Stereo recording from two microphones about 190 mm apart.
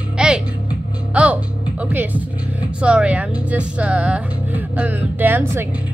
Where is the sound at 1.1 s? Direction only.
5° right (ahead or behind).